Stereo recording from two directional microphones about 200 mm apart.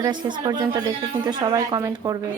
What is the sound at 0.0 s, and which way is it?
Speech, 20° right (ahead or behind).